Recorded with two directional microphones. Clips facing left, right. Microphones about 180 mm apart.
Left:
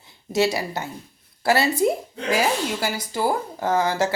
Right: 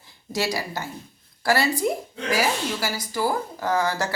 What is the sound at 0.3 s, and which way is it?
A woman's voice, 25° left (ahead or behind).